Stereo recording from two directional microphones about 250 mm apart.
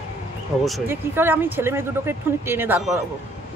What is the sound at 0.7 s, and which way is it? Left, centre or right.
Speech, centre.